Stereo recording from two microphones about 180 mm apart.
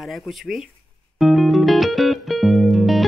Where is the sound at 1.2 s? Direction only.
Centre (ahead or behind).